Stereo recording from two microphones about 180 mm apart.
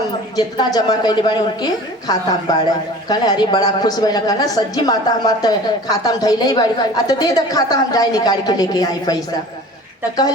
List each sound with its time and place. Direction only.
0.3 s a woman's voice: 20° left (ahead or behind)